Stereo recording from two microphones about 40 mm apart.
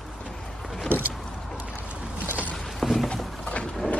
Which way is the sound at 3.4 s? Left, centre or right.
Left.